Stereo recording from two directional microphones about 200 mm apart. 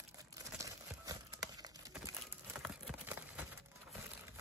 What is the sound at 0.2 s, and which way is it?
Crumpling, 15° right (ahead or behind).